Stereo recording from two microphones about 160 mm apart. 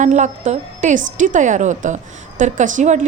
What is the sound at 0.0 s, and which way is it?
A woman's voice, 50° right (ahead or behind).